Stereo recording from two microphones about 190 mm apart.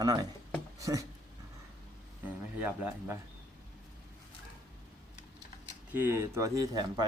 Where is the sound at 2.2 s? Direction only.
10° right (ahead or behind).